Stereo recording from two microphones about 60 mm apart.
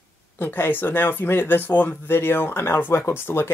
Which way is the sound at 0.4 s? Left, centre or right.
Left.